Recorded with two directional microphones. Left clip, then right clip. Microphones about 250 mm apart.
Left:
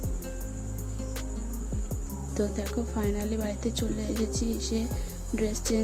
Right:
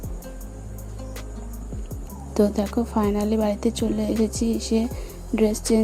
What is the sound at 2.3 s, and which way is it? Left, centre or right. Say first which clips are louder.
Speech: right 10 dB; right.